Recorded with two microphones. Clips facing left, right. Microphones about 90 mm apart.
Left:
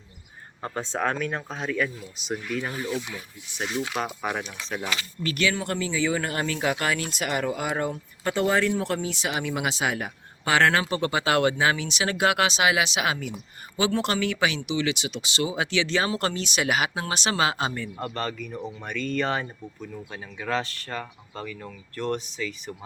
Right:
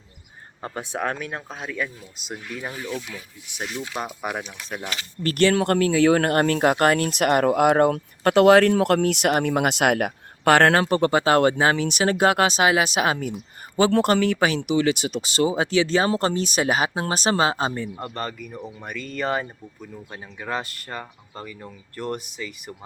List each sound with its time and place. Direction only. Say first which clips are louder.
0.6 s speech: even; 15° right (ahead or behind)
2.8 s speech: left 1 dB; 10° left (ahead or behind)
3.9 s speech: even; 5° right (ahead or behind)
5.2 s speech: right 8 dB; 50° right (ahead or behind); by 17.8 s 35° right (ahead or behind)
17.8 s speech: even; 20° right (ahead or behind)
18.2 s speech: left 1 dB; 10° right (ahead or behind)